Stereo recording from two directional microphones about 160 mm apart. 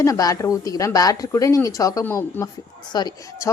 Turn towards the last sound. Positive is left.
turn(degrees=20)  # may be behind; listen again after turning